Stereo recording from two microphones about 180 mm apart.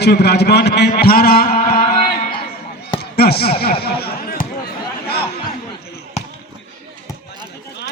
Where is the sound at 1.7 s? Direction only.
55° left (ahead or behind).